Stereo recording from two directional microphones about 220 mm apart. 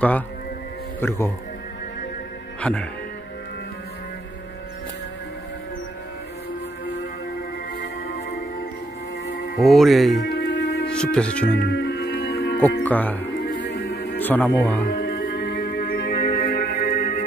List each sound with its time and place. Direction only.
1.0 s speech: 10° left (ahead or behind)
2.6 s speech: 5° left (ahead or behind)
7.7 s music: 45° left (ahead or behind)
9.6 s speech: centre (ahead or behind)
10.2 s music: 50° left (ahead or behind)
10.9 s speech: 5° left (ahead or behind)
11.5 s music: 50° left (ahead or behind)
12.8 s speech: 5° left (ahead or behind)
13.3 s music: 45° left (ahead or behind)
14.2 s speech: 10° left (ahead or behind)
14.8 s music: 50° left (ahead or behind)